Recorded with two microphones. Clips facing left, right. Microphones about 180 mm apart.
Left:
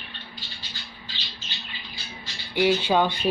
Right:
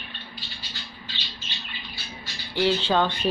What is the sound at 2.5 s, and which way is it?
Speech, 15° left (ahead or behind).